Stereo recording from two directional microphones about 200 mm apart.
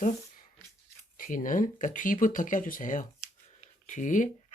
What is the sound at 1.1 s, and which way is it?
Speech, 40° left (ahead or behind).